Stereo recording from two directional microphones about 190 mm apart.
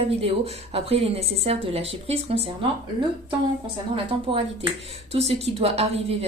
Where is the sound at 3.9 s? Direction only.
30° right (ahead or behind).